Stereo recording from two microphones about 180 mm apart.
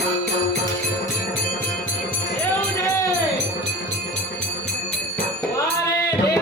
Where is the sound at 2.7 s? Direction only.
15° left (ahead or behind).